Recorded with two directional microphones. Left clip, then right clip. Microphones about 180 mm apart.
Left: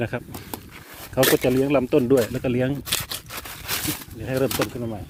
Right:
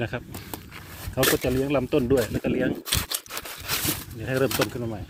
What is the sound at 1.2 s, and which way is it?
Speech, 55° left (ahead or behind).